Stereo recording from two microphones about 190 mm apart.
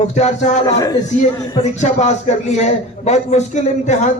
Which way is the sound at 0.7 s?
20° left (ahead or behind).